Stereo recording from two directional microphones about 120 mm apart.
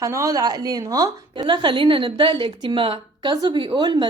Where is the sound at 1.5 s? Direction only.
40° right (ahead or behind).